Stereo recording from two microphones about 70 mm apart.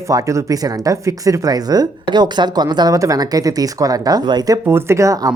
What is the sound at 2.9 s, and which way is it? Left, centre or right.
Speech, right.